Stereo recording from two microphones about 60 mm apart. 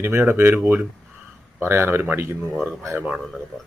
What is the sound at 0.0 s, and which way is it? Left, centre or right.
Speech, right.